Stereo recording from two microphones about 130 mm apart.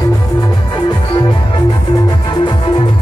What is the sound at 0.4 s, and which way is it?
Music, 35° left (ahead or behind).